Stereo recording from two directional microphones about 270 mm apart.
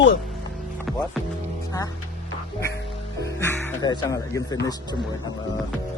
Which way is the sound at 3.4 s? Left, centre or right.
Centre.